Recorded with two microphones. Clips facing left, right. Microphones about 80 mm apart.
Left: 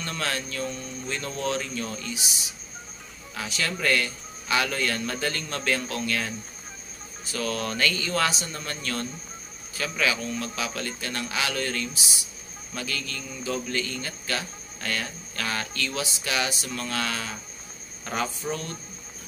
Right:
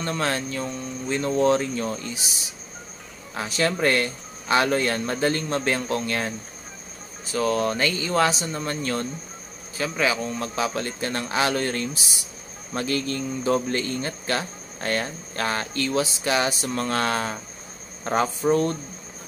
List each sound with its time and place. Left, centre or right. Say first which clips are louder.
0.0 s speech: right 5 dB; right
3.3 s speech: right 7 dB; right
7.3 s speech: right 6 dB; right